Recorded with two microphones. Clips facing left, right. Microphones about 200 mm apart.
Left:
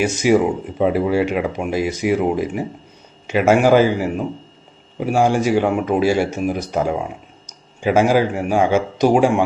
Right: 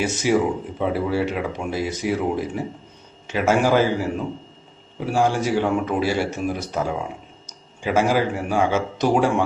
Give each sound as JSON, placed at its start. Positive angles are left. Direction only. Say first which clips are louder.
{"t": 0.0, "sound": "a man's voice", "louder": "left 4 dB", "side_deg": 15}